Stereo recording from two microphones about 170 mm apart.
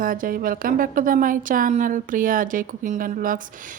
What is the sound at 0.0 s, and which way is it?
A woman's voice, 55° right (ahead or behind).